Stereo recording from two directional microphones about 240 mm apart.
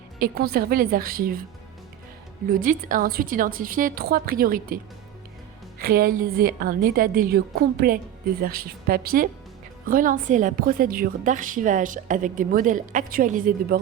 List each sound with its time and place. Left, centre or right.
0.2 s a woman's voice: right
2.5 s a woman's voice: right
5.8 s a woman's voice: right